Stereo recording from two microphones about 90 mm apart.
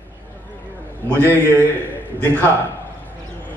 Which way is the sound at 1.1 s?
25° right (ahead or behind).